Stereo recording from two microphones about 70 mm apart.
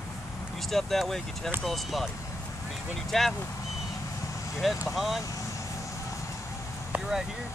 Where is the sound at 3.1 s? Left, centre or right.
Centre.